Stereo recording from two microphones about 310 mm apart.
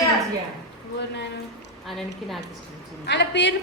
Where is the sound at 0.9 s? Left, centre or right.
Left.